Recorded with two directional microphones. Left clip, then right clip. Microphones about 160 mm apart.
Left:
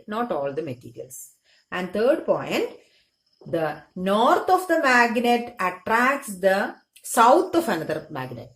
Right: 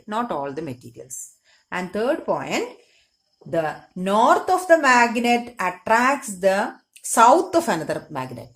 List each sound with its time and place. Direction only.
0.1 s a woman's voice: 25° right (ahead or behind)